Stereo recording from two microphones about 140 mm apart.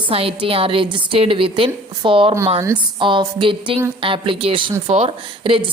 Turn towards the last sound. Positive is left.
turn(degrees=-40)  # may be behind; listen again after turning